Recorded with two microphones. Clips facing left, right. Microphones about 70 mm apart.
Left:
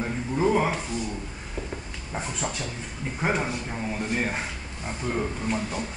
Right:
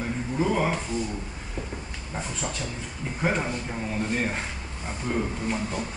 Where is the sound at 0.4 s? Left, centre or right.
Centre.